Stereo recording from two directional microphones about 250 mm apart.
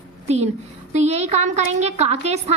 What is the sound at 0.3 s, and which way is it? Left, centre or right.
A woman's voice, right.